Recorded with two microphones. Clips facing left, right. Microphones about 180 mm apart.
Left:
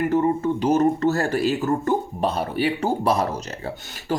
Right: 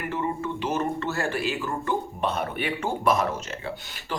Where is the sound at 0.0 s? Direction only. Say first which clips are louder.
Left 9 dB; 40° left (ahead or behind).